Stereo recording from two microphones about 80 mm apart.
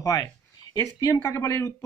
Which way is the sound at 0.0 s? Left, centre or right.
Left.